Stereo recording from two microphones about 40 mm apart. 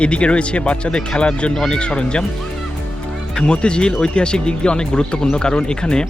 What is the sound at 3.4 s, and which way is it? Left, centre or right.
Speech, left.